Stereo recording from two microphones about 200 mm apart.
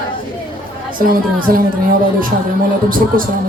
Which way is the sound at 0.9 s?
45° right (ahead or behind).